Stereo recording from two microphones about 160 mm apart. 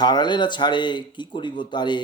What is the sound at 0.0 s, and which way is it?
Speech, 25° left (ahead or behind).